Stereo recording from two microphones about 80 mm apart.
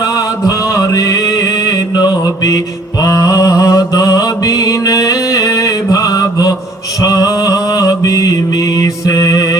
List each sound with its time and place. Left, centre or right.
0.0 s music: left
3.0 s mantra: left